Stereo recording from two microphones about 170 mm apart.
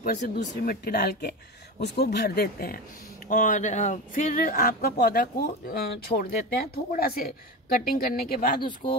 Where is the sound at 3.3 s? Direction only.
50° left (ahead or behind).